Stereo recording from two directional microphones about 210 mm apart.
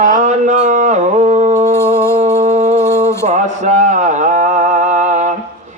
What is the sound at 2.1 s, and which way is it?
Music, 35° right (ahead or behind).